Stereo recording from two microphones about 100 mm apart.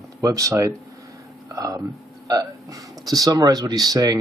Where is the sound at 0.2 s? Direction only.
35° right (ahead or behind).